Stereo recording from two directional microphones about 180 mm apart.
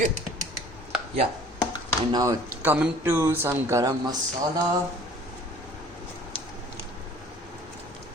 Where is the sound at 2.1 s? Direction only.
20° right (ahead or behind).